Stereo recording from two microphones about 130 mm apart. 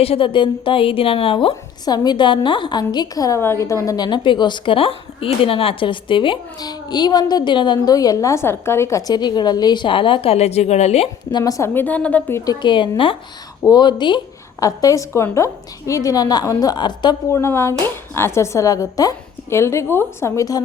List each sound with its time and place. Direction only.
0.0 s a woman's voice: 45° left (ahead or behind)
1.8 s a woman's voice: 30° left (ahead or behind); by 11.1 s 55° left (ahead or behind)
11.3 s a woman's voice: 30° left (ahead or behind); by 12.4 s 10° left (ahead or behind)
12.5 s a woman's voice: 40° left (ahead or behind)
17.3 s speech: 20° left (ahead or behind)